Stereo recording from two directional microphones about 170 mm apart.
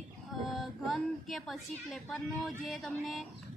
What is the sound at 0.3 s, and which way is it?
A woman's voice, centre (ahead or behind).